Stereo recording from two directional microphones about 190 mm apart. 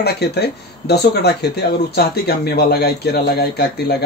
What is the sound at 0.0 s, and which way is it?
Speech, 60° left (ahead or behind).